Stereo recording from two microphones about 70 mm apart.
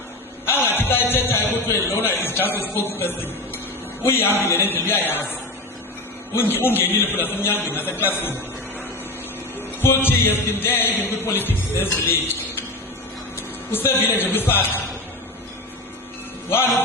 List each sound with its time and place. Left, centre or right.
0.4 s a sound: left
1.1 s a man's voice: left
9.6 s music: left
10.5 s a man's voice: left
13.3 s a man's voice: left